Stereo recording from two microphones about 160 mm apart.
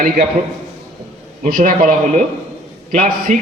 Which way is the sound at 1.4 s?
60° right (ahead or behind).